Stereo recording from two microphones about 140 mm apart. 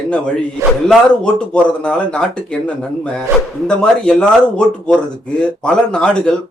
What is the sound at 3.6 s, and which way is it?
Speech, 5° left (ahead or behind).